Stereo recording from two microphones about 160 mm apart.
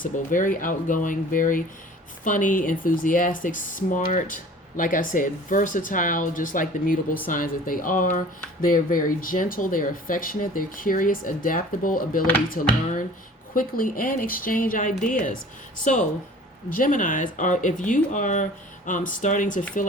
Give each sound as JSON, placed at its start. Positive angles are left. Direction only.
{"t": 0.0, "sound": "speech", "side_deg": 55}